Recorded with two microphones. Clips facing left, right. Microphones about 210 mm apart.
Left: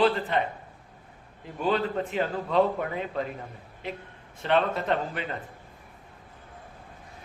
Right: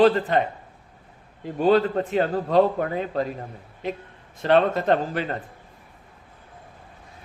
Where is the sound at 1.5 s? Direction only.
35° right (ahead or behind).